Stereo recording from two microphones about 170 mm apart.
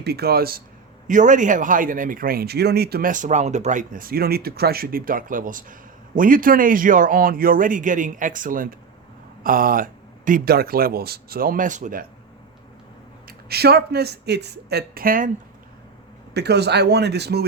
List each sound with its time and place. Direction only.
0.0 s speech: 70° right (ahead or behind)
1.0 s a man's voice: 50° right (ahead or behind)
13.2 s speech: 70° right (ahead or behind)
16.3 s speech: 75° right (ahead or behind)